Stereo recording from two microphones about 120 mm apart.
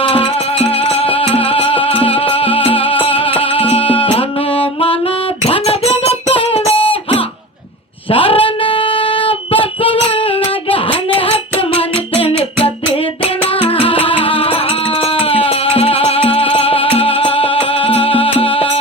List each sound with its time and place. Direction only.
0.0 s music: 50° left (ahead or behind)
8.1 s female singing: 50° left (ahead or behind)
10.7 s music: 50° left (ahead or behind)